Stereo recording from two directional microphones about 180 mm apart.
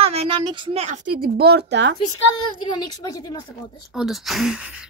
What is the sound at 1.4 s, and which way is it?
Speech, 65° right (ahead or behind).